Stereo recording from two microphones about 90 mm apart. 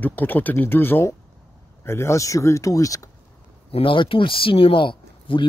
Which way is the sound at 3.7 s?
70° left (ahead or behind).